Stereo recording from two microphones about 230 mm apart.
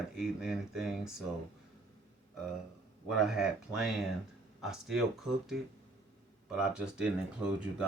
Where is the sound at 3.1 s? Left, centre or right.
Centre.